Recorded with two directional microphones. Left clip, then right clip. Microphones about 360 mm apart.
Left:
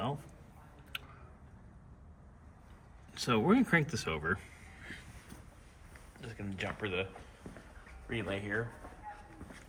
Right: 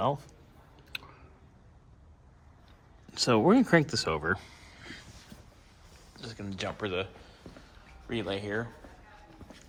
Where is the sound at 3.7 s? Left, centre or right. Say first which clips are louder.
Right 6 dB; right.